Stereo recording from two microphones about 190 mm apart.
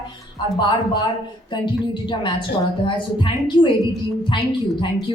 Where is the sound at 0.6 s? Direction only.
25° left (ahead or behind).